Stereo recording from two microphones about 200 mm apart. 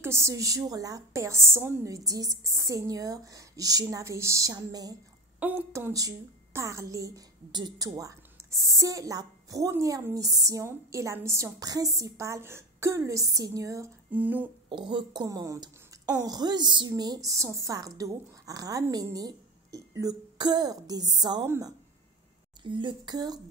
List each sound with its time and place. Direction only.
0.0 s a woman's voice: 15° right (ahead or behind)
14.7 s a woman's voice: 25° right (ahead or behind)